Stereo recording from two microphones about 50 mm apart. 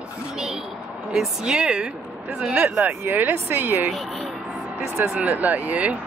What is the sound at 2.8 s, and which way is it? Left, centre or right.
Speech, right.